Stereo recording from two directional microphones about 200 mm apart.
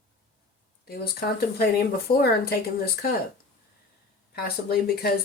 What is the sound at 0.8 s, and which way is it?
Speech, 50° left (ahead or behind).